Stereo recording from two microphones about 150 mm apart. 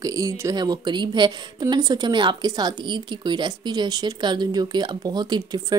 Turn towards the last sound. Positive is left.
turn(degrees=-30)  # may be behind; listen again after turning